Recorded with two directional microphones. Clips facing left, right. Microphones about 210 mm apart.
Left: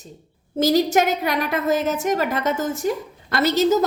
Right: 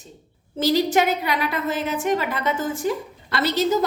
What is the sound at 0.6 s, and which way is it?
A woman's voice, 45° left (ahead or behind).